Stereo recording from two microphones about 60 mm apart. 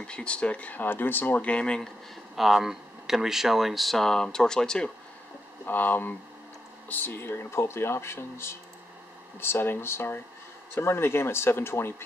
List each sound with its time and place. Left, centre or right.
0.0 s speech: centre
2.3 s speech: centre
5.7 s speech: left